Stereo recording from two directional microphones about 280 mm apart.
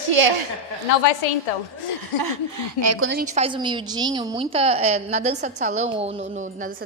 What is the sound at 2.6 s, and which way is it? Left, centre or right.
Speech, right.